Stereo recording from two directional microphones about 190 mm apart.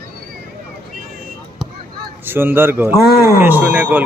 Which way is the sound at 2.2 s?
10° right (ahead or behind).